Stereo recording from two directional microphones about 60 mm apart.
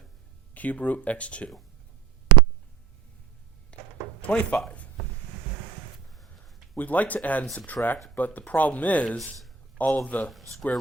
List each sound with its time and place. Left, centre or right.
0.5 s speech: left
3.7 s a sound: left
4.3 s speech: left
6.7 s speech: left
10.2 s speech: centre